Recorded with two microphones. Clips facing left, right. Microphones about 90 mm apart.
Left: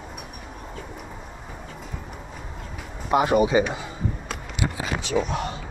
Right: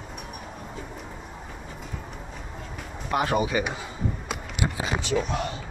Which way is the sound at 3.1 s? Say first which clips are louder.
Left 5 dB; 20° left (ahead or behind).